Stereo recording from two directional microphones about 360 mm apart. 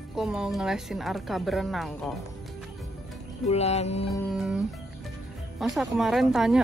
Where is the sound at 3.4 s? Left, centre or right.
Centre.